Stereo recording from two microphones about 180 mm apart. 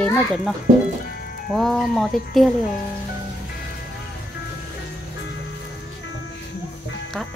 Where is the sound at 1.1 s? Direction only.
55° left (ahead or behind).